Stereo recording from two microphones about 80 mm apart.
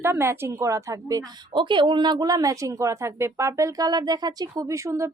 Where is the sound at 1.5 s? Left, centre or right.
Right.